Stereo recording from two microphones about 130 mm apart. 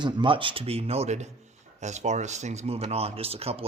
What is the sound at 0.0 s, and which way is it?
Speech, 40° right (ahead or behind).